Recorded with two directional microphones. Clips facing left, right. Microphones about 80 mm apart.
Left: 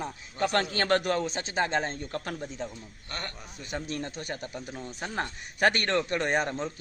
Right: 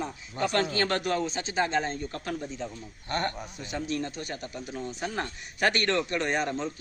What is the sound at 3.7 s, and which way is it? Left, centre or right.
Speech, left.